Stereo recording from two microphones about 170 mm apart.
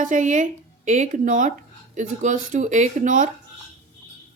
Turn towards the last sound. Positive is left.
turn(degrees=-45)  # may be behind; listen again after turning